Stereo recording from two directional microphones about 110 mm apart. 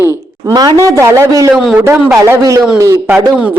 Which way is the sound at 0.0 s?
25° right (ahead or behind).